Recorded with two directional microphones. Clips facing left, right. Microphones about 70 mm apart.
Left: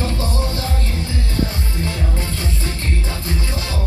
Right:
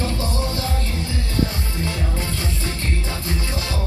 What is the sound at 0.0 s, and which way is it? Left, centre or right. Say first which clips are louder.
Music: left 1 dB; left.